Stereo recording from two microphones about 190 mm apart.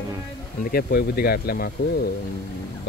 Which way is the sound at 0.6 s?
55° left (ahead or behind).